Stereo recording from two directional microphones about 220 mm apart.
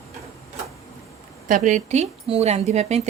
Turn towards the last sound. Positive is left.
turn(degrees=-30)  # may be behind; listen again after turning